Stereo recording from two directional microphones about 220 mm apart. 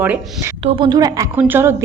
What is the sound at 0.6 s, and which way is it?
A woman's voice, 20° right (ahead or behind).